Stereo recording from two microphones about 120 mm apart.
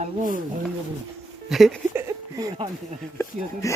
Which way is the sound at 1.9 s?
20° right (ahead or behind).